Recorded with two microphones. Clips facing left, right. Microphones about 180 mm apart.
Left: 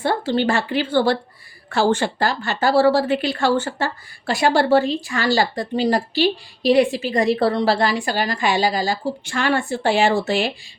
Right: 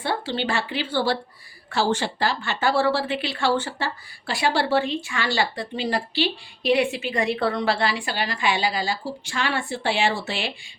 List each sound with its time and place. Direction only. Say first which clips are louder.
0.0 s speech: left 7 dB; 45° left (ahead or behind)